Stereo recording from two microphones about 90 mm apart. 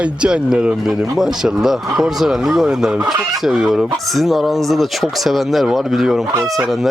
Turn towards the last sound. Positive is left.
turn(degrees=-5)  # may be behind; listen again after turning